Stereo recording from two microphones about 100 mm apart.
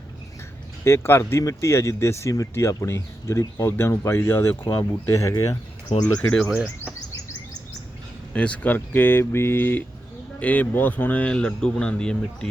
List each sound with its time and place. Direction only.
0.9 s speech: 25° left (ahead or behind)
6.1 s a man's voice: 10° left (ahead or behind)
6.5 s speech: 10° right (ahead or behind)
8.3 s a man's voice: 15° left (ahead or behind)